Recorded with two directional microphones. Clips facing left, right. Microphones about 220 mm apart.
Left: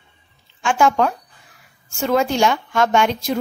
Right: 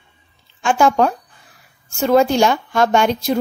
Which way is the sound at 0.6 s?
35° right (ahead or behind).